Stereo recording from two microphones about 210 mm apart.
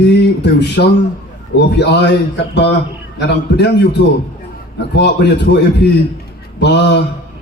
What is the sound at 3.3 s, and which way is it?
Speech, 55° left (ahead or behind).